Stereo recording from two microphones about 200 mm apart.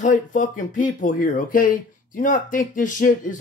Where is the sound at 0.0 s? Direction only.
40° left (ahead or behind).